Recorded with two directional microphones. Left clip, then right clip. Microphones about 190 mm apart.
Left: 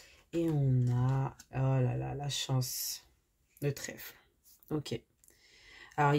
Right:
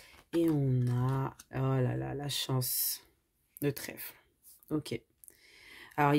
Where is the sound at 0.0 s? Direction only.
30° right (ahead or behind).